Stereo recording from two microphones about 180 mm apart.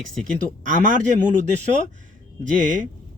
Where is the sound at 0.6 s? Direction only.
45° right (ahead or behind).